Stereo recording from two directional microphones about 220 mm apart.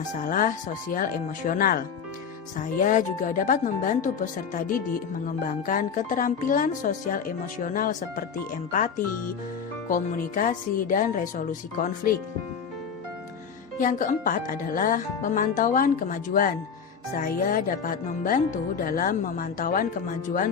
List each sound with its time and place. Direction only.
0.1 s speech: 35° left (ahead or behind)
9.9 s speech: 35° left (ahead or behind)
13.7 s speech: 35° left (ahead or behind)